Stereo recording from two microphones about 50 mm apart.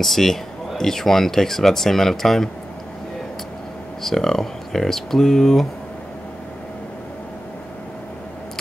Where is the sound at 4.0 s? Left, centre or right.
Centre.